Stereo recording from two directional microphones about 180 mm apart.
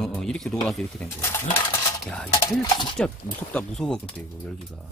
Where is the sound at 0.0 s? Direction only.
Centre (ahead or behind).